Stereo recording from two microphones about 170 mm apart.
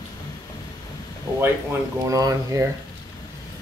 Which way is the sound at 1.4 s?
15° right (ahead or behind).